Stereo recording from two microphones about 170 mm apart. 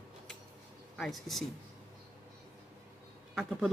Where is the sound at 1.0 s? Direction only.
Centre (ahead or behind).